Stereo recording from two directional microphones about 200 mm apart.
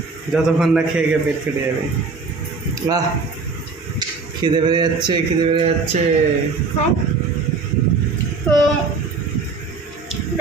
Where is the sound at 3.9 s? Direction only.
20° right (ahead or behind).